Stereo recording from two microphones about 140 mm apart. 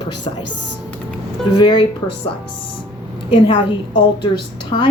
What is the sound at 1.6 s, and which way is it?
Speech, 35° left (ahead or behind).